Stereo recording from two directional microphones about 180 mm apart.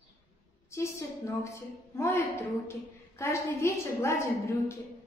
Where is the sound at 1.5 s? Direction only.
15° left (ahead or behind).